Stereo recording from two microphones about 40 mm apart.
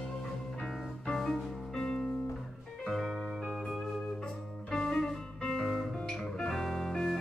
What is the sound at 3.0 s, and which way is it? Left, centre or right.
Music, centre.